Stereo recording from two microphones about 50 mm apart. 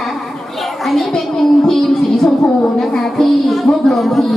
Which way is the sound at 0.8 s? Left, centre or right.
Centre.